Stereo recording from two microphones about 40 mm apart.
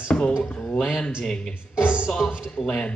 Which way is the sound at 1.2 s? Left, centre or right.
Centre.